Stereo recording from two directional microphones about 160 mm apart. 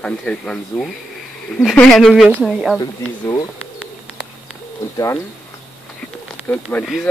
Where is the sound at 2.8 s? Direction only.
25° left (ahead or behind).